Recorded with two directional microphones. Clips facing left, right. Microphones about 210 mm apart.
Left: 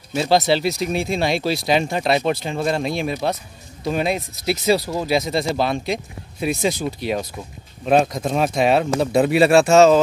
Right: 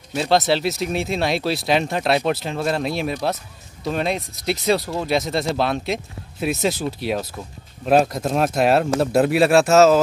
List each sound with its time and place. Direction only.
0.1 s speech: centre (ahead or behind)